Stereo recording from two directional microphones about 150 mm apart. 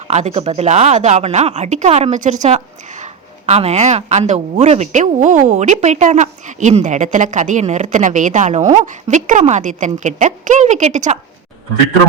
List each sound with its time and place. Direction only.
0.1 s speech: 45° right (ahead or behind)